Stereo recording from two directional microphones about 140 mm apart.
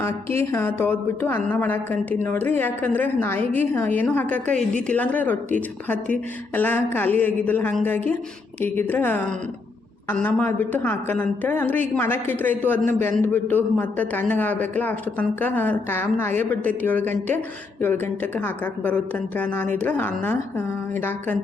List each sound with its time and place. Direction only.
0.0 s speech: 15° left (ahead or behind)